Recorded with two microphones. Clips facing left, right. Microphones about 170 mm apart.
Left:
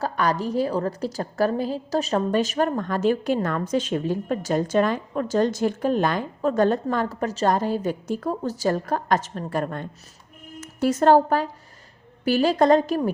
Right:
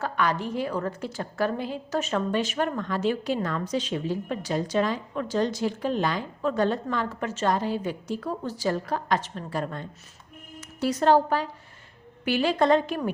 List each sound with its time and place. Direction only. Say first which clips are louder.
0.0 s a woman's voice: left 3 dB; 40° left (ahead or behind)